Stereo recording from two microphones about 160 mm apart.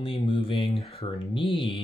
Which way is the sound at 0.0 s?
35° left (ahead or behind).